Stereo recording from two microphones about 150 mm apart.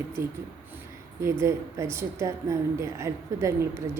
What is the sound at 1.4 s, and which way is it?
A woman's voice, 20° right (ahead or behind).